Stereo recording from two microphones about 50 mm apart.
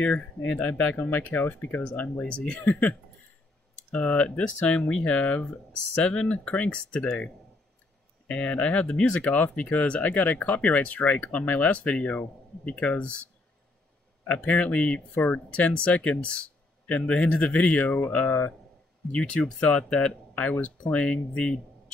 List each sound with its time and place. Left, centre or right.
0.0 s speech: left
0.9 s speech: left
2.6 s speech: left
3.9 s speech: left
14.2 s speech: left
19.1 s speech: left